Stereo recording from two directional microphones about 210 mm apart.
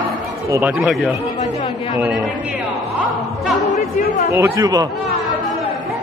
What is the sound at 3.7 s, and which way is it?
Speech, 35° left (ahead or behind).